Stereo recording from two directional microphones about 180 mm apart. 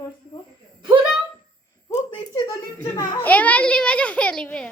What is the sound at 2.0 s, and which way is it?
A child's voice, 20° left (ahead or behind).